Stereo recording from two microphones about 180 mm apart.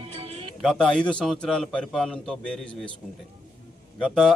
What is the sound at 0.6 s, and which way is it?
Speech, 5° left (ahead or behind).